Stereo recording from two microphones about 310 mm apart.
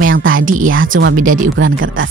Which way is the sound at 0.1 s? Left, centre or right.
Right.